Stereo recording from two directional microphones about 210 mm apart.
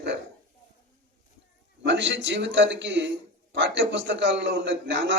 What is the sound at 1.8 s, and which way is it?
A man's voice, 55° right (ahead or behind).